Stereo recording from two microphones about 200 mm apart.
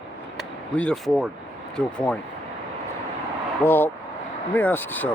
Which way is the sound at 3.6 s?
10° left (ahead or behind).